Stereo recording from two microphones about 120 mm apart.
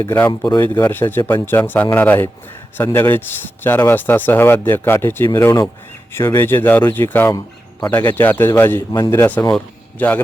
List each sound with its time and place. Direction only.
0.0 s speech: 20° left (ahead or behind)
0.3 s speech: 30° left (ahead or behind)
0.8 s speech: 20° left (ahead or behind)